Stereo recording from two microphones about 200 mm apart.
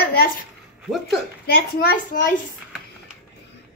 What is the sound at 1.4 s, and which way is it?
Speech, 50° left (ahead or behind).